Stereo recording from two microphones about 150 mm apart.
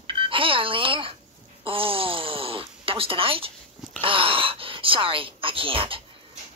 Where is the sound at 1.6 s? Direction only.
35° right (ahead or behind).